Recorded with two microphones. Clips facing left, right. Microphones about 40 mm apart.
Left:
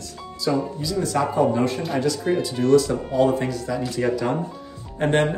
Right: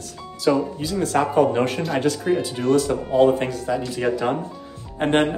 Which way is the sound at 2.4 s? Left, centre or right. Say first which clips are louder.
Left 2 dB; right.